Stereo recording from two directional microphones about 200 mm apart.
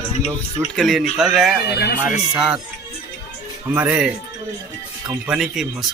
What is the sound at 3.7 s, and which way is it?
Speech, 10° right (ahead or behind).